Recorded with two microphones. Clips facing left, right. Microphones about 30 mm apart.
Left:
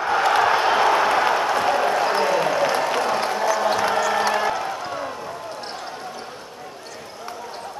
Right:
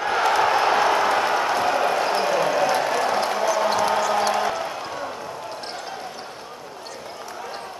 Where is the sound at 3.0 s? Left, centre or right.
Centre.